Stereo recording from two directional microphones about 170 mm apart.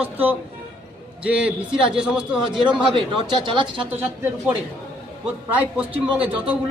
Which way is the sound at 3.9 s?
10° right (ahead or behind).